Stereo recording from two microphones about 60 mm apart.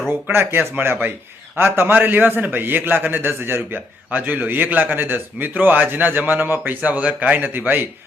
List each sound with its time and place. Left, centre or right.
0.1 s a man's voice: right